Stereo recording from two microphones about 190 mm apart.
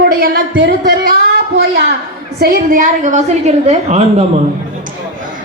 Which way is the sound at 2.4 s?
40° right (ahead or behind).